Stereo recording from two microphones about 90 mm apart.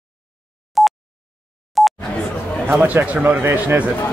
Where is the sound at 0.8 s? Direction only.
Centre (ahead or behind).